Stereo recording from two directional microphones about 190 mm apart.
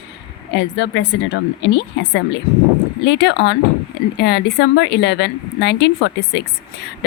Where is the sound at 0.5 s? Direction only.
70° left (ahead or behind).